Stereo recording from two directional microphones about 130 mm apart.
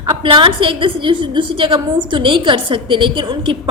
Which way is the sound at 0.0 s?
40° right (ahead or behind).